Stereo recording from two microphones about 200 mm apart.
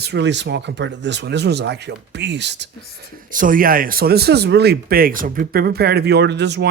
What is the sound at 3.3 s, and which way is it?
A man's voice, 40° right (ahead or behind).